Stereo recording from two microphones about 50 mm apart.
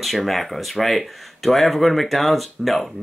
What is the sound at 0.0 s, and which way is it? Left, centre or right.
Speech, centre.